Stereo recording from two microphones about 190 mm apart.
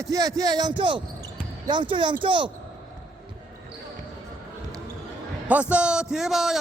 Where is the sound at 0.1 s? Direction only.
20° right (ahead or behind).